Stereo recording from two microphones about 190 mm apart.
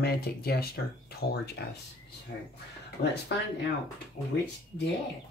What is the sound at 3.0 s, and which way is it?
Speech, 40° left (ahead or behind).